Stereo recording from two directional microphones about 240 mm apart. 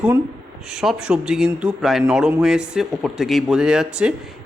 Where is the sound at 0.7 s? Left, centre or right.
Centre.